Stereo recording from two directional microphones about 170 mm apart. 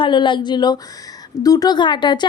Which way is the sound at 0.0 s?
30° left (ahead or behind).